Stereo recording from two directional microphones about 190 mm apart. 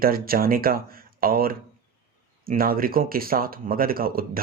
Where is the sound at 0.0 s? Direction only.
50° right (ahead or behind).